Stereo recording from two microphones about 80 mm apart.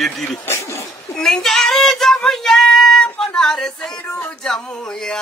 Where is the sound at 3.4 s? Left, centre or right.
Centre.